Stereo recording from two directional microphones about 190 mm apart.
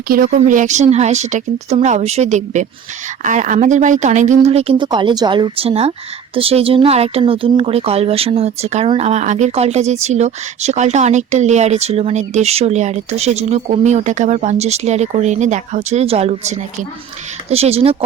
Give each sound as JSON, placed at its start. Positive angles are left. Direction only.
{"t": 0.1, "sound": "speech", "side_deg": -40}